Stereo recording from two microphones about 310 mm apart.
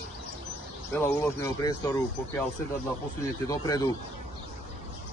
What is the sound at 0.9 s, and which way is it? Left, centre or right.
Speech, centre.